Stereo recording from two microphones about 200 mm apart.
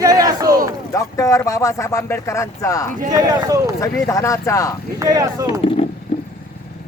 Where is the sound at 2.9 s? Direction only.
40° right (ahead or behind).